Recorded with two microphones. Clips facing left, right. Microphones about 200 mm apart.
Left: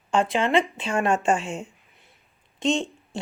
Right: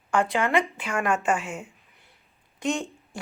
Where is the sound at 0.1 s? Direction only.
25° left (ahead or behind).